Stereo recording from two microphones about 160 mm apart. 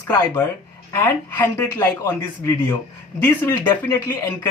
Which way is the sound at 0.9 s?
10° left (ahead or behind).